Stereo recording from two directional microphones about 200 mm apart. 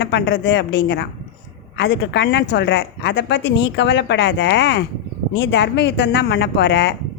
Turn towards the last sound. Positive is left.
turn(degrees=60)  # may be behind; listen again after turning